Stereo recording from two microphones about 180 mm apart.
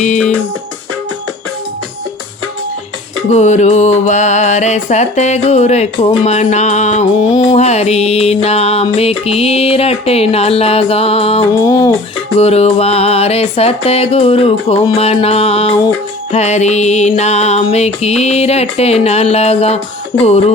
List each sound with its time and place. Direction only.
3.3 s music: 40° left (ahead or behind)
7.2 s speech: 25° left (ahead or behind)
7.5 s music: 35° left (ahead or behind)
11.5 s speech: 20° left (ahead or behind)
12.4 s music: 35° left (ahead or behind)